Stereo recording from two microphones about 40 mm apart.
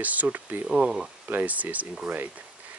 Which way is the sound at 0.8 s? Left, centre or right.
Centre.